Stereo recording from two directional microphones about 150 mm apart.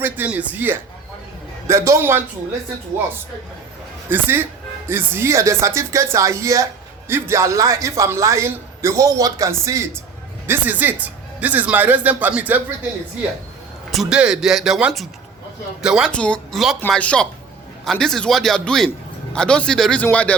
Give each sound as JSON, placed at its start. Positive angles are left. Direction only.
{"t": 0.0, "sound": "a sound", "side_deg": -10}
{"t": 1.6, "sound": "speech", "side_deg": -20}
{"t": 4.1, "sound": "speech", "side_deg": -15}
{"t": 13.9, "sound": "speech", "side_deg": -5}
{"t": 16.1, "sound": "a man's voice", "side_deg": 5}